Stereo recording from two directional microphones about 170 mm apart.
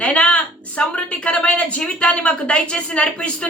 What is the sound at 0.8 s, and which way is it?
Speech, 5° left (ahead or behind).